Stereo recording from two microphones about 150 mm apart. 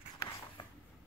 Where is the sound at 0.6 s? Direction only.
30° left (ahead or behind).